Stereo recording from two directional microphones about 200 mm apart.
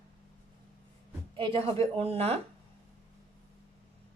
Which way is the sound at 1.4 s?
25° right (ahead or behind).